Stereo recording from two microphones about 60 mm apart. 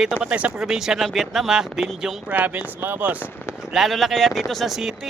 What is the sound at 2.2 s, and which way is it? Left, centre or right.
Speech, right.